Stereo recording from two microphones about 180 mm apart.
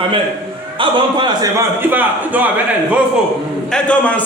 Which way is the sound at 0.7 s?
25° right (ahead or behind).